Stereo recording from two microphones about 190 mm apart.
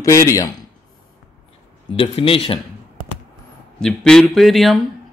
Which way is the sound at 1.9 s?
30° left (ahead or behind).